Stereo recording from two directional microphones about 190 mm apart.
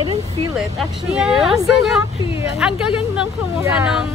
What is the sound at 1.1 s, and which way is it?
Speech, 5° right (ahead or behind).